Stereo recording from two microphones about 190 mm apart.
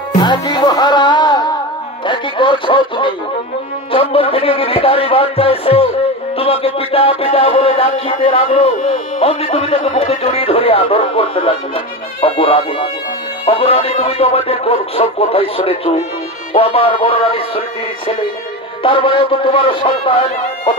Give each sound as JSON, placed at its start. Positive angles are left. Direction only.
{"t": 0.2, "sound": "music", "side_deg": 25}
{"t": 13.5, "sound": "speech", "side_deg": 30}
{"t": 16.5, "sound": "music", "side_deg": 30}